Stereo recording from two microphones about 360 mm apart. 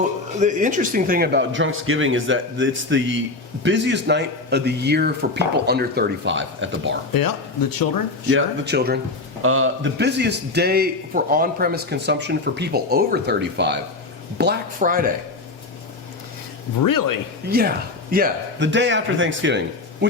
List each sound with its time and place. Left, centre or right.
0.3 s a man's voice: right
7.1 s speech: left
8.3 s a man's voice: right
16.8 s speech: left
17.5 s a man's voice: right